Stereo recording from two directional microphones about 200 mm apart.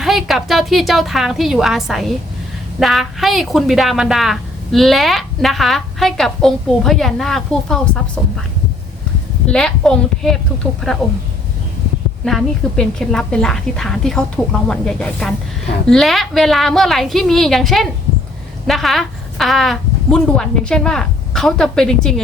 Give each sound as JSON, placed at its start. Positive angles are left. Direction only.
{"t": 0.0, "sound": "a woman's voice", "side_deg": 0}
{"t": 9.5, "sound": "a woman's voice", "side_deg": 5}
{"t": 12.2, "sound": "a woman's voice", "side_deg": 0}